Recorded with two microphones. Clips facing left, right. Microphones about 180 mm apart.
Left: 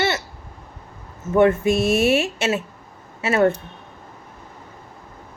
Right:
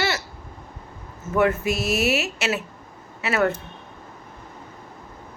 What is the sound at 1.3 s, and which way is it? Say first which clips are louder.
A woman's voice: left 5 dB; 25° left (ahead or behind).